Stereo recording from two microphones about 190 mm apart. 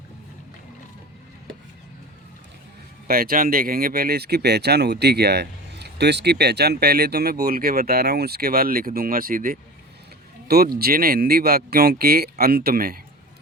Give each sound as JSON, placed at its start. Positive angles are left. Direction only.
{"t": 3.1, "sound": "speech", "side_deg": -50}
{"t": 10.8, "sound": "speech", "side_deg": -50}